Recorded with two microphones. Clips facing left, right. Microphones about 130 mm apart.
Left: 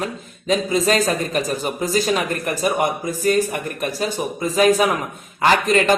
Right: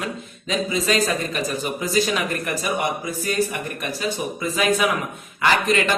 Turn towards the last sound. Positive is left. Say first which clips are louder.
# left 4 dB
turn(degrees=40)  # may be behind; listen again after turning